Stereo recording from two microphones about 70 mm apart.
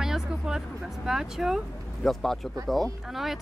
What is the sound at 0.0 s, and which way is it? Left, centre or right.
Vehicle, centre.